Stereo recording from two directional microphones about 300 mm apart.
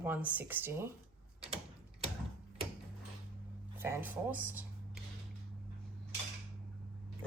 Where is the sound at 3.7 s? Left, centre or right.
Centre.